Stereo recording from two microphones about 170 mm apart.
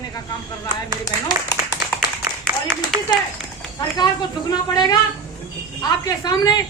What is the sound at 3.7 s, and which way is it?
Speech, 25° left (ahead or behind).